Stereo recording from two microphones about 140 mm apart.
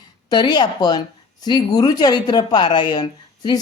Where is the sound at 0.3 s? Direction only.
30° left (ahead or behind).